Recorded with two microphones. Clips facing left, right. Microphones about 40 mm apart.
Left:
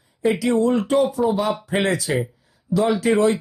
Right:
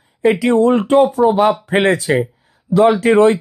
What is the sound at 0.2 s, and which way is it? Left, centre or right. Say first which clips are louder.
Speech: right 6 dB; right.